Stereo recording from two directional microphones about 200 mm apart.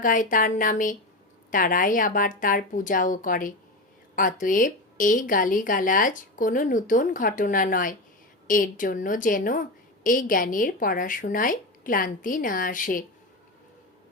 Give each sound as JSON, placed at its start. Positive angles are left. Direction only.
{"t": 0.0, "sound": "a woman's voice", "side_deg": 40}